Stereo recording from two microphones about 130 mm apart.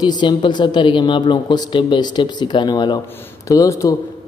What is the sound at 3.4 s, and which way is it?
Speech, 25° left (ahead or behind).